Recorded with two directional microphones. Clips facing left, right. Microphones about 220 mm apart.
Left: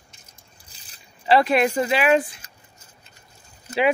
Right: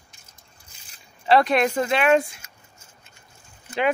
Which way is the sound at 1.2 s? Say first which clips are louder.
Left 1 dB; 5° left (ahead or behind).